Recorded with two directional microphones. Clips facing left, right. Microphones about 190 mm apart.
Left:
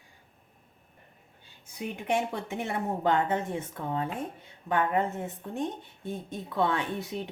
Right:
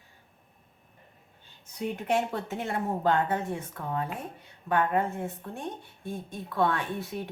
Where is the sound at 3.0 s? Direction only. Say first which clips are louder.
Even; 20° left (ahead or behind).